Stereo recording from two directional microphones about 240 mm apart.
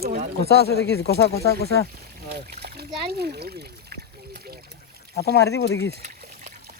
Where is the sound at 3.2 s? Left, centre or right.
Right.